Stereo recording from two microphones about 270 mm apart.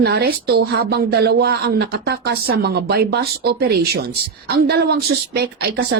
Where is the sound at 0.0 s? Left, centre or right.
Right.